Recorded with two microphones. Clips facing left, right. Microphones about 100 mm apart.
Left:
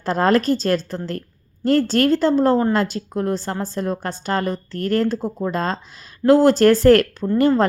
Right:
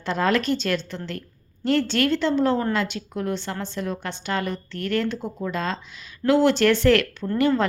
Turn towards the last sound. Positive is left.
turn(degrees=40)  # may be behind; listen again after turning